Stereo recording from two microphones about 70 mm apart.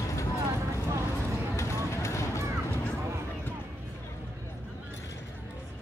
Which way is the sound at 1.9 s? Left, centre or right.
Left.